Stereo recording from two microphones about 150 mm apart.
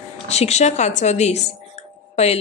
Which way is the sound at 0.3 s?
45° left (ahead or behind).